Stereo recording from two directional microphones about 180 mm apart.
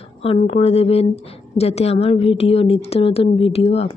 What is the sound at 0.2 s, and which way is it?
A woman's voice, 30° left (ahead or behind).